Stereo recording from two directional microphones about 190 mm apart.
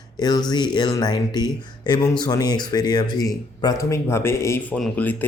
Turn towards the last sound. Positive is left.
turn(degrees=10)  # may be behind; listen again after turning